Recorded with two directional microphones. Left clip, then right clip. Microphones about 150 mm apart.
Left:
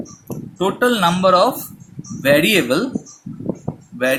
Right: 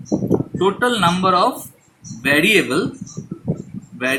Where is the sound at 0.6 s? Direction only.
55° left (ahead or behind).